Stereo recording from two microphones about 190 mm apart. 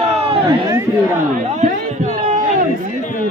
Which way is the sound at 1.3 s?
35° right (ahead or behind).